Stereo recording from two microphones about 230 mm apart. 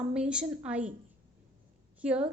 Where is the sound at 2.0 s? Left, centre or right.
Centre.